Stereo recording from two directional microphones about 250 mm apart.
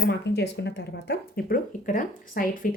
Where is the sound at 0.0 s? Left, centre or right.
Left.